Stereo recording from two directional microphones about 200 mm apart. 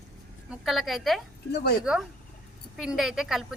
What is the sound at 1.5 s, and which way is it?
Speech, 55° left (ahead or behind).